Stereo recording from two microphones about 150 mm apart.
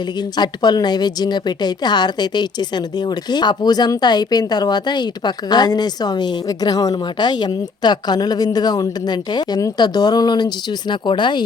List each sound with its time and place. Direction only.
0.3 s a woman's voice: 30° left (ahead or behind)